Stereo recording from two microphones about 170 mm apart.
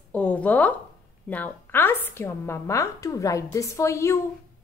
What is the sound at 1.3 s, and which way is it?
A woman's voice, 10° left (ahead or behind).